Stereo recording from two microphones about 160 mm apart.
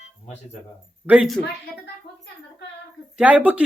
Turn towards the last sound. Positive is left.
turn(degrees=-10)  # may be behind; listen again after turning